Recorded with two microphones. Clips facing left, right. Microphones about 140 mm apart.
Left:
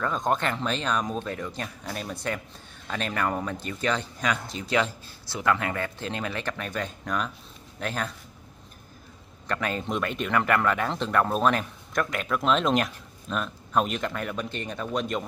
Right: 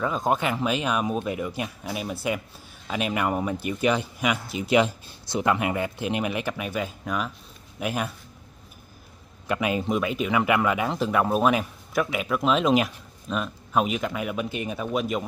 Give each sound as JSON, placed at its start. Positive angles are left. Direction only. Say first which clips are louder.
{"t": 0.0, "sound": "speech", "louder": "right 2 dB", "side_deg": -5}
{"t": 9.5, "sound": "speech", "louder": "right 4 dB", "side_deg": -10}